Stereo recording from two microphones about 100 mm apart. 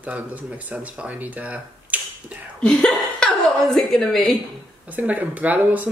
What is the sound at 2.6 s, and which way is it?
A woman's voice, 10° left (ahead or behind).